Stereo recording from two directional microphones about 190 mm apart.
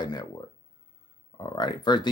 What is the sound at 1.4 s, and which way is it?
Speech, 25° left (ahead or behind).